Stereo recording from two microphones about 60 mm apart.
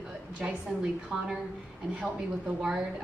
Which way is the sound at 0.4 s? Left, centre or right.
Centre.